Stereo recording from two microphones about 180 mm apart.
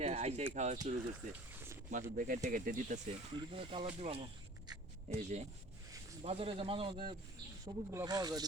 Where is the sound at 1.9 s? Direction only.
45° right (ahead or behind).